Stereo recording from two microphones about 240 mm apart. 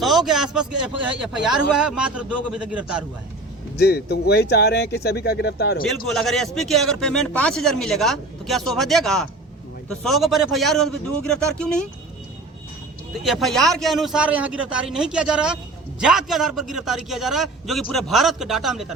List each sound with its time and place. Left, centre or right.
0.0 s a man's voice: centre
3.8 s speech: left
5.8 s a man's voice: centre
13.2 s a man's voice: centre